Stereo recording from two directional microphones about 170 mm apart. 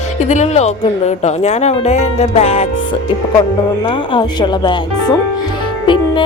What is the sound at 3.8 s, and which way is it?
Speech, 30° left (ahead or behind).